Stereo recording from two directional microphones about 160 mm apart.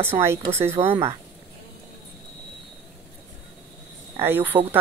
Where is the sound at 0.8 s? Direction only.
35° right (ahead or behind).